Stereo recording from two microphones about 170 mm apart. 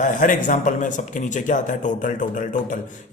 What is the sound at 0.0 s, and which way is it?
A man's voice, 50° left (ahead or behind).